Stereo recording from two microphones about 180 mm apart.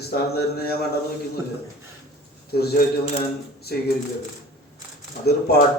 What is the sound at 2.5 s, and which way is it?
Speech, 60° left (ahead or behind).